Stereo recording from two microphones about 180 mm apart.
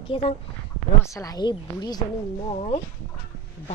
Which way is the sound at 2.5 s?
35° left (ahead or behind).